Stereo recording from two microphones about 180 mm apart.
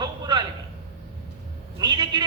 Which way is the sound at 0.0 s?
25° right (ahead or behind).